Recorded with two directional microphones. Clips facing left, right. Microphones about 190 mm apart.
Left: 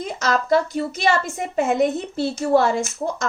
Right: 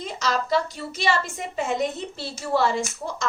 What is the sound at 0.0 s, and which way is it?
A woman's voice, 50° left (ahead or behind).